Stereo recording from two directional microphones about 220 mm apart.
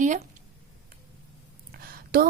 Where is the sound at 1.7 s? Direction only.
40° right (ahead or behind).